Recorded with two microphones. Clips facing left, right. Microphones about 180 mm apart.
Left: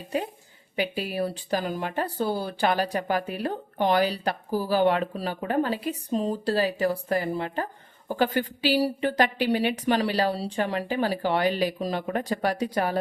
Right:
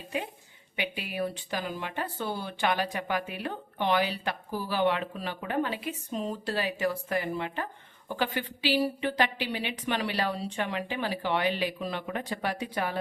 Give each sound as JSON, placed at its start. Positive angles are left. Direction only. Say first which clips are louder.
{"t": 0.1, "sound": "speech", "louder": "left 5 dB", "side_deg": 40}